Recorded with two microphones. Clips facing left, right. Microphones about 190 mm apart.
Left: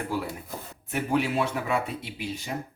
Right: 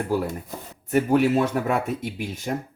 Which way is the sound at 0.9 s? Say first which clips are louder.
Right 7 dB; 45° right (ahead or behind).